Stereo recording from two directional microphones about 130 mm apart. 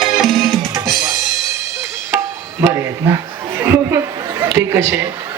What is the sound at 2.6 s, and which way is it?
Speech, 20° right (ahead or behind).